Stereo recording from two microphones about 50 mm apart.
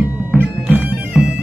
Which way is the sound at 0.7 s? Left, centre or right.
Right.